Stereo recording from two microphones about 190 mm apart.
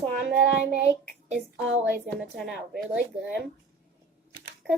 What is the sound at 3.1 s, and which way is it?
Speech, 60° right (ahead or behind).